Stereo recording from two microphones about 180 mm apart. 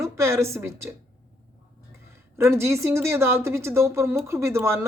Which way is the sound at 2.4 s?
15° right (ahead or behind).